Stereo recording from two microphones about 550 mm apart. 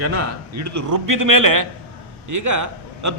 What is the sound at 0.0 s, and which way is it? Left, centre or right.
A man's voice, right.